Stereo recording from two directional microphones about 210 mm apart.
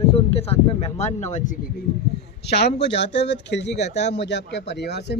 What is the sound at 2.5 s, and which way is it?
A man's voice, 55° left (ahead or behind).